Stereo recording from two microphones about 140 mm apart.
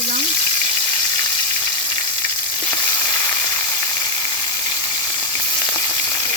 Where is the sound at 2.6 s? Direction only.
30° left (ahead or behind).